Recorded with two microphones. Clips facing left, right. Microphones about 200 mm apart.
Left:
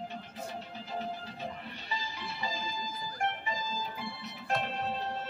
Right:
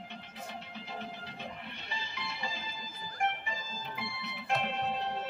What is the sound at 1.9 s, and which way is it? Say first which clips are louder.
Music: left 3 dB; 40° left (ahead or behind).